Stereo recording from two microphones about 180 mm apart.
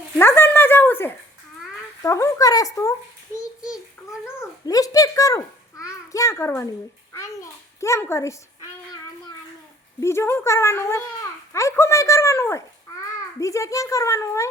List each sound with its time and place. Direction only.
0.2 s a sound: 10° left (ahead or behind)
2.0 s speech: 15° left (ahead or behind)
4.4 s a child's voice: 20° left (ahead or behind)
7.8 s a woman's voice: 15° left (ahead or behind)
10.0 s speech: 15° left (ahead or behind)